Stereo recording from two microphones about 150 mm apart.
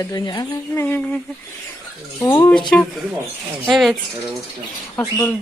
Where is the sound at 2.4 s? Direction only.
15° left (ahead or behind).